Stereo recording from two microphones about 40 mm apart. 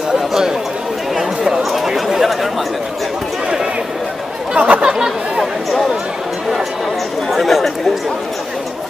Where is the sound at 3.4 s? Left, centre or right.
Centre.